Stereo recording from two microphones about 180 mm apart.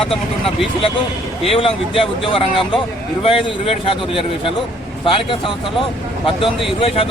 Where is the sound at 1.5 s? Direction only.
30° left (ahead or behind).